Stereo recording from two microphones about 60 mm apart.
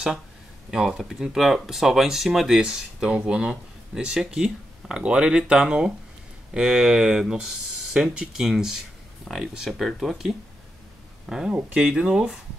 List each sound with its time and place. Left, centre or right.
0.7 s speech: centre
2.5 s speech: centre
11.2 s speech: centre